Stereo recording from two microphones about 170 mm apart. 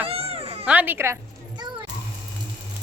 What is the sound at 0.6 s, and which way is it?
Speech, 10° right (ahead or behind).